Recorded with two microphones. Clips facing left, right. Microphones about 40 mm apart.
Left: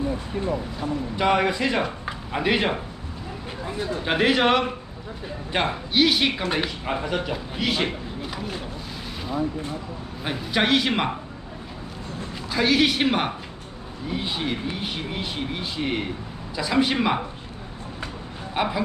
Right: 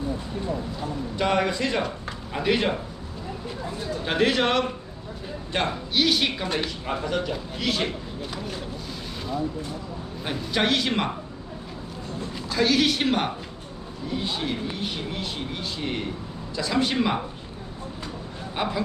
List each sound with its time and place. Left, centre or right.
0.1 s speech: left
0.8 s a man's voice: centre
3.7 s speech: left
4.0 s a man's voice: centre
12.5 s a man's voice: centre
18.5 s a man's voice: centre